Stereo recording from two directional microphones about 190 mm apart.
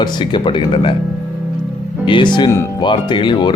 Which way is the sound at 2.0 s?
25° left (ahead or behind).